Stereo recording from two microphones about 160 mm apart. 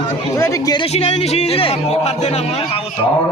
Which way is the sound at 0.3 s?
20° left (ahead or behind).